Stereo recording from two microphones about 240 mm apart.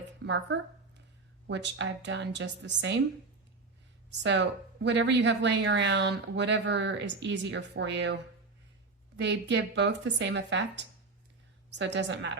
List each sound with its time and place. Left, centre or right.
0.3 s speech: right
4.2 s speech: right
11.7 s speech: right